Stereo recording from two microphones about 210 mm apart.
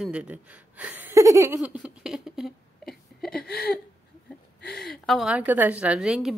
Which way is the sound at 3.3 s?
45° left (ahead or behind).